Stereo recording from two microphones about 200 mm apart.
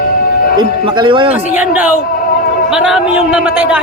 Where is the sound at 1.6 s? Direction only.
10° right (ahead or behind).